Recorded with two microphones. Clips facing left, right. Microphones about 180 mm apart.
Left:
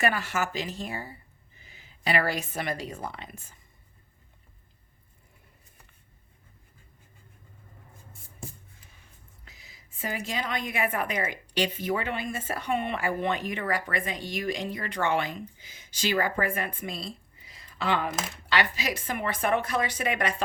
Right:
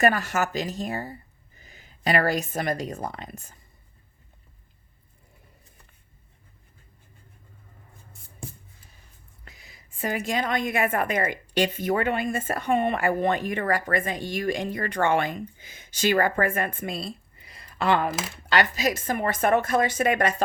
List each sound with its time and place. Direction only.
0.0 s speech: 45° right (ahead or behind)
9.6 s a sound: 55° right (ahead or behind)
10.2 s speech: 50° right (ahead or behind)